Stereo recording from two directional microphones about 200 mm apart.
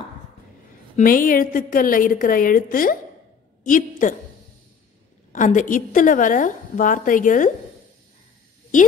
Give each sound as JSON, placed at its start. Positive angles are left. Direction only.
{"t": 0.9, "sound": "a woman's voice", "side_deg": 45}
{"t": 5.3, "sound": "a woman's voice", "side_deg": 40}